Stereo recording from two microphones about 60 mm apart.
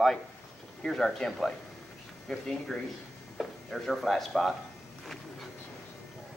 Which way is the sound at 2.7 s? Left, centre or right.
Centre.